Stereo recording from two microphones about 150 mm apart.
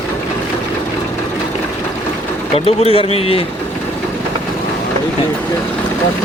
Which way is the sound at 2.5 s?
40° left (ahead or behind).